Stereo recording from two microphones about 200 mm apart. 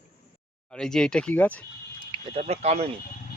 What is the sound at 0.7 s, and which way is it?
Speech, 5° left (ahead or behind).